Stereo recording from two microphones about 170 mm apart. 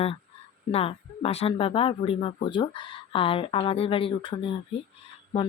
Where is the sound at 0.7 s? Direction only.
35° left (ahead or behind).